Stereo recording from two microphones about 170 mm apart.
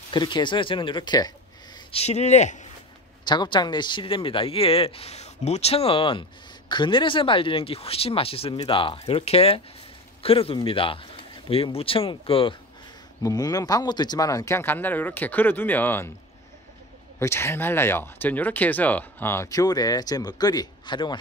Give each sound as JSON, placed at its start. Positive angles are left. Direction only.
{"t": 0.1, "sound": "speech", "side_deg": 30}
{"t": 1.9, "sound": "speech", "side_deg": 40}
{"t": 3.3, "sound": "speech", "side_deg": 25}
{"t": 17.2, "sound": "speech", "side_deg": 15}